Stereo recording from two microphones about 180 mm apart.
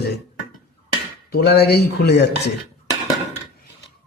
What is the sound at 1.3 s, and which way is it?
A man's voice, 60° left (ahead or behind).